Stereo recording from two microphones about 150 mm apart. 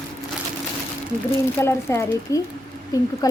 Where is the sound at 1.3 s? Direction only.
15° left (ahead or behind).